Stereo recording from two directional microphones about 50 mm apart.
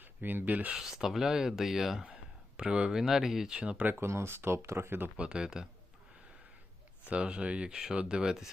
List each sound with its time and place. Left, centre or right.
0.0 s speech: right
0.8 s speech: centre
2.6 s speech: centre
2.9 s speech: centre
3.8 s speech: right
4.0 s speech: right
5.1 s speech: right
7.1 s speech: right